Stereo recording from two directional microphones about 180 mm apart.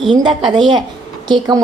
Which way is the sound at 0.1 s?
25° right (ahead or behind).